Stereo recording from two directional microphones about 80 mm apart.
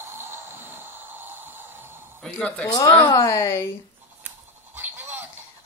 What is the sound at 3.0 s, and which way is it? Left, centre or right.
Speech, left.